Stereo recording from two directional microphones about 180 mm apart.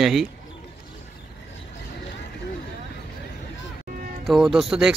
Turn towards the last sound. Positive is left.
turn(degrees=-5)  # may be behind; listen again after turning